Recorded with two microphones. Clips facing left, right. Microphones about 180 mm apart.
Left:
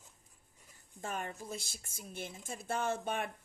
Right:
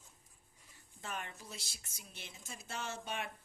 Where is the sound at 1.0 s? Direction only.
45° left (ahead or behind).